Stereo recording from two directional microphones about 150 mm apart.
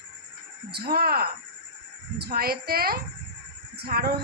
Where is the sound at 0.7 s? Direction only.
90° right.